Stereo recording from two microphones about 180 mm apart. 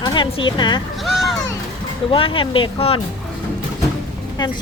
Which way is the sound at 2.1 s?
30° left (ahead or behind).